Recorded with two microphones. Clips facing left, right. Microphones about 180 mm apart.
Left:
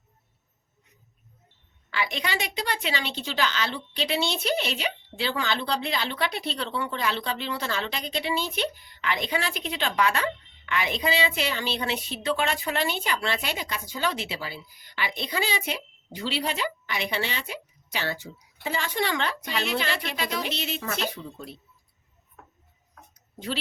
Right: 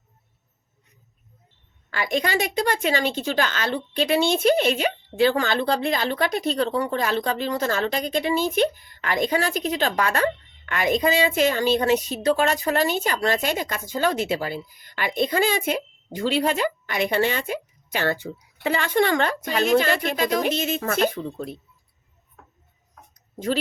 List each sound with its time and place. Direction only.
1.9 s a woman's voice: 45° right (ahead or behind)